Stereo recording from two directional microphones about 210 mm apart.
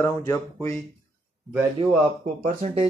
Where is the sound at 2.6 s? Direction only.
30° right (ahead or behind).